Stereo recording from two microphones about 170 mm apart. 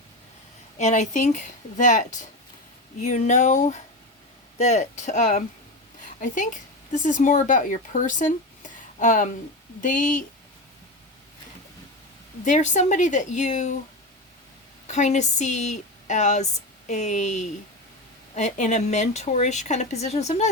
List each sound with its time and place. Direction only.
0.8 s speech: 45° left (ahead or behind)
12.5 s speech: 45° left (ahead or behind)
14.8 s speech: 45° left (ahead or behind)